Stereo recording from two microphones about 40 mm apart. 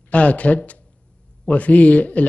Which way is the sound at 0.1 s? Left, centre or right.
Left.